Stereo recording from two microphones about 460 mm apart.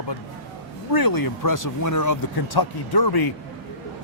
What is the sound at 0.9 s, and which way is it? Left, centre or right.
Speech, left.